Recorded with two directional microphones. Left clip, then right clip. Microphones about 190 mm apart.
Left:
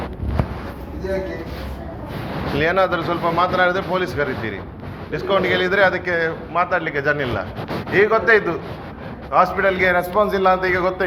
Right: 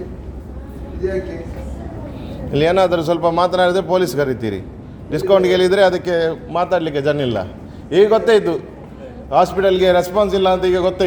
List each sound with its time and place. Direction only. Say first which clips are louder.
2.6 s a man's voice: right 4 dB; 65° right (ahead or behind)